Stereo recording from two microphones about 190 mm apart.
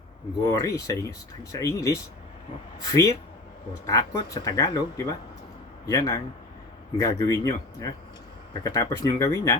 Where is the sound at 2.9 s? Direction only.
15° left (ahead or behind).